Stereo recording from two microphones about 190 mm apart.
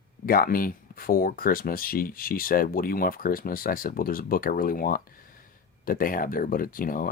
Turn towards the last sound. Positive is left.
turn(degrees=50)  # may be behind; listen again after turning